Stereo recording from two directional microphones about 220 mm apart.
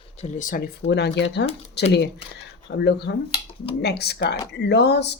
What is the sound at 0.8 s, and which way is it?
Speech, 50° left (ahead or behind).